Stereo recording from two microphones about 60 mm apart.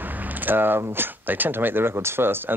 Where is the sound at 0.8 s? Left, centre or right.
Right.